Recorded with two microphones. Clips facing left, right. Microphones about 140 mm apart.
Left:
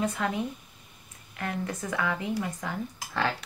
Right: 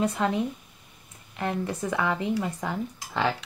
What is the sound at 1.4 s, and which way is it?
Speech, 20° right (ahead or behind).